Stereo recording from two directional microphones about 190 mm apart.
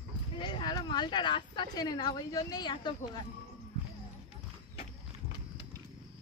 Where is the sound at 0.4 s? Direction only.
25° left (ahead or behind).